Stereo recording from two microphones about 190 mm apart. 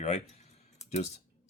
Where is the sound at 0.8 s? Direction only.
35° left (ahead or behind).